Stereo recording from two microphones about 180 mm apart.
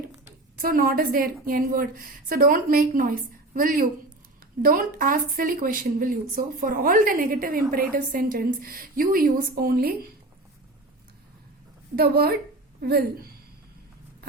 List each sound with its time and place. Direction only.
0.6 s speech: 55° right (ahead or behind)
11.9 s a woman's voice: 60° right (ahead or behind)